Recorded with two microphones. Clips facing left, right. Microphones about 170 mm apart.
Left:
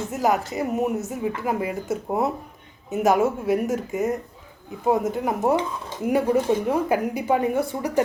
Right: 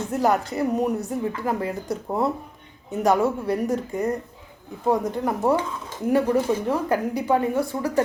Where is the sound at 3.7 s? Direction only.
5° left (ahead or behind).